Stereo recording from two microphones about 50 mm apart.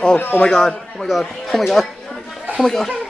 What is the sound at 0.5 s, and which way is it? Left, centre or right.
A man's voice, centre.